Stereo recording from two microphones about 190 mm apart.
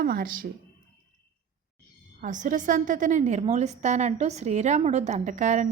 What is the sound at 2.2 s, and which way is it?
A woman's voice, 40° right (ahead or behind).